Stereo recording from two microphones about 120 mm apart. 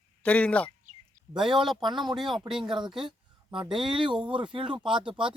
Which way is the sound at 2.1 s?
5° right (ahead or behind).